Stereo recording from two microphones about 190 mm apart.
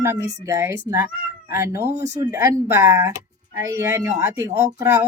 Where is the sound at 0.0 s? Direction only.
15° right (ahead or behind).